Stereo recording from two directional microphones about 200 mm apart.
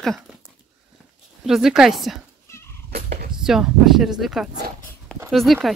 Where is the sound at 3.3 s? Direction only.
5° right (ahead or behind).